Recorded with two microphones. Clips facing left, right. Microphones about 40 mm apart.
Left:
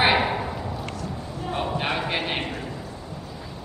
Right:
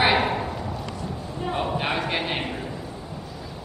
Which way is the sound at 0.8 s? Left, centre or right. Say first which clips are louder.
Even; left.